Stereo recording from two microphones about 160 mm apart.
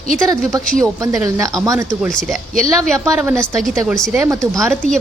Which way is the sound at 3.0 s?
10° right (ahead or behind).